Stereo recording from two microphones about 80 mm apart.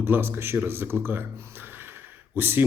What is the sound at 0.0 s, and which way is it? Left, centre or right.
Speech, right.